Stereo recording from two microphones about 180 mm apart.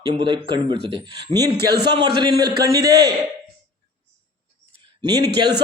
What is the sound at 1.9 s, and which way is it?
A man's voice, 25° right (ahead or behind).